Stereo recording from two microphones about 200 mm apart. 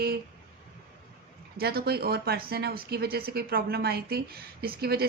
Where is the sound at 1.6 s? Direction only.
50° right (ahead or behind).